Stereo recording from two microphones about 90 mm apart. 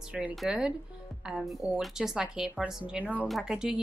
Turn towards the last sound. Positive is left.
turn(degrees=-10)  # may be behind; listen again after turning